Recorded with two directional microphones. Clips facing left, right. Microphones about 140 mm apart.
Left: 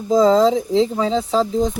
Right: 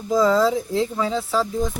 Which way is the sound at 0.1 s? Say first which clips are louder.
Left 4 dB; 20° left (ahead or behind).